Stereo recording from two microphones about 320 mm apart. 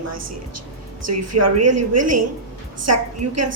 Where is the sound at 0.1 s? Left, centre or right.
Right.